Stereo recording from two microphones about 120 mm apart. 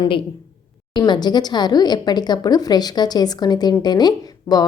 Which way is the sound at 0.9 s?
40° left (ahead or behind).